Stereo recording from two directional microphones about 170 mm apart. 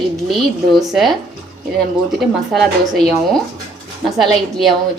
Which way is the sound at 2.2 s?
Centre (ahead or behind).